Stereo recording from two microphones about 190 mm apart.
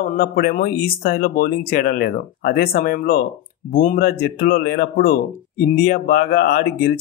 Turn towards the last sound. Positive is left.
turn(degrees=55)  # may be behind; listen again after turning